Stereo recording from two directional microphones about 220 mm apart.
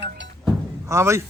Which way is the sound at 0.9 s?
15° right (ahead or behind).